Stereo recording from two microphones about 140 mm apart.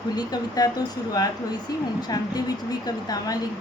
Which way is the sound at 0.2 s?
30° left (ahead or behind).